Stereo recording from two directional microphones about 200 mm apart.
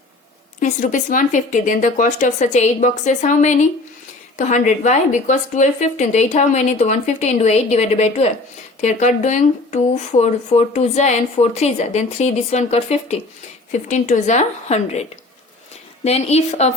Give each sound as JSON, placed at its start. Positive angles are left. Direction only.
{"t": 0.6, "sound": "speech", "side_deg": 40}
{"t": 16.0, "sound": "speech", "side_deg": 30}